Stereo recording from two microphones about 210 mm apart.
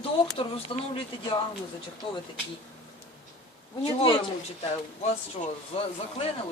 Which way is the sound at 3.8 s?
25° left (ahead or behind).